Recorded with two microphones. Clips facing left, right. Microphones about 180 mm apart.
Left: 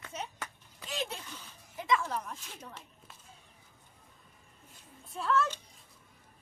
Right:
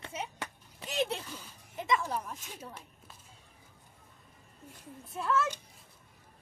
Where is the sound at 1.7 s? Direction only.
20° right (ahead or behind).